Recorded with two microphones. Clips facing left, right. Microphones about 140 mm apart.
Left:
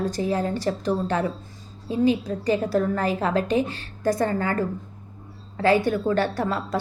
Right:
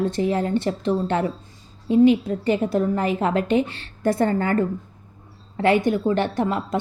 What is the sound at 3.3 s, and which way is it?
Speech, 30° left (ahead or behind).